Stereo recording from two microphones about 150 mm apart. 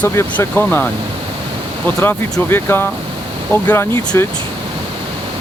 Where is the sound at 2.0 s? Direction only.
15° left (ahead or behind).